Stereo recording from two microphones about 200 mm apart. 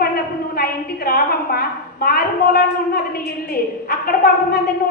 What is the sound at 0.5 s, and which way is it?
A woman's voice, 50° left (ahead or behind).